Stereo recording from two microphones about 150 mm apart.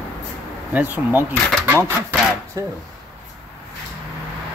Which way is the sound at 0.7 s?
10° right (ahead or behind).